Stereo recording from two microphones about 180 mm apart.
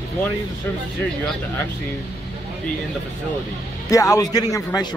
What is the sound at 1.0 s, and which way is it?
Speech, 5° left (ahead or behind).